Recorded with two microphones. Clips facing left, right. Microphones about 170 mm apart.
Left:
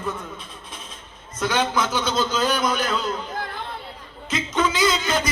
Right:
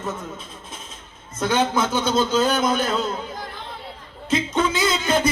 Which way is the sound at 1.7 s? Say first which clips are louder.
Right 2 dB; 25° right (ahead or behind).